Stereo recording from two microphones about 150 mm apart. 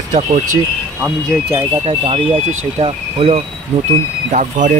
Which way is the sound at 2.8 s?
40° right (ahead or behind).